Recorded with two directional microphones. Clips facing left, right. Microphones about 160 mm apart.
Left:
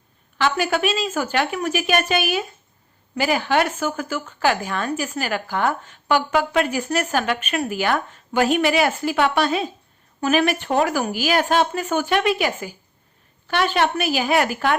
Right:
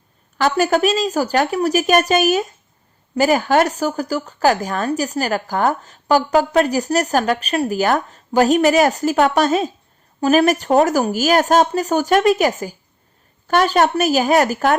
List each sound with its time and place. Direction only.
0.3 s a woman's voice: 40° right (ahead or behind)